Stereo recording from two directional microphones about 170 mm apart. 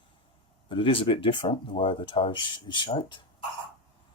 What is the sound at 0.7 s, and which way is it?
Speech, 30° left (ahead or behind).